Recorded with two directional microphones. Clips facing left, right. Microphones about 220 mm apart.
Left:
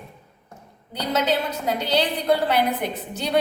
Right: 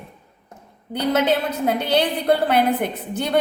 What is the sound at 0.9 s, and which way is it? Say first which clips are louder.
A woman's voice: right 4 dB; 55° right (ahead or behind).